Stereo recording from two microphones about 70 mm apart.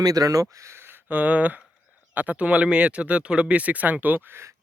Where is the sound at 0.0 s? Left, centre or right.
Right.